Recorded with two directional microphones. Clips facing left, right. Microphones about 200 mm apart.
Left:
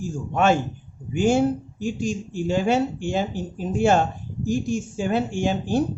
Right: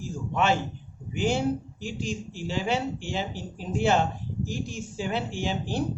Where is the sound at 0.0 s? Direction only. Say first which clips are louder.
Left 5 dB; 50° left (ahead or behind).